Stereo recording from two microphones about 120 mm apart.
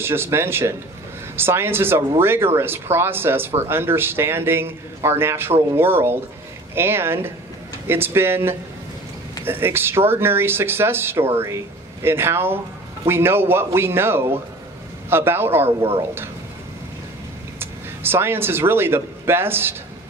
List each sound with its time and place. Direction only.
0.0 s speech: 20° right (ahead or behind)
17.6 s speech: 20° right (ahead or behind)